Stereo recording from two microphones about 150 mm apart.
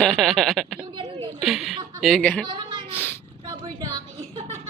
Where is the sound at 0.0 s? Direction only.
5° left (ahead or behind).